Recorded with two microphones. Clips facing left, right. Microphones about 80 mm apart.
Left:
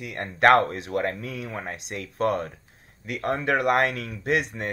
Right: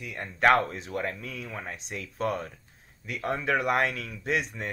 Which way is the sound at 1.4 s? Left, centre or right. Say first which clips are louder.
Left 3 dB; left.